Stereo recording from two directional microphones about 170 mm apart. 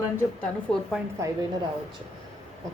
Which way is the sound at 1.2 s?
15° right (ahead or behind).